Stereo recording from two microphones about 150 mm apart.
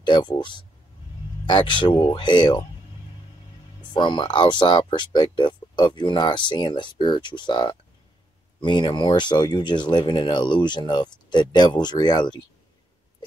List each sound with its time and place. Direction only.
0.0 s speech: 30° left (ahead or behind)
3.9 s speech: 30° left (ahead or behind)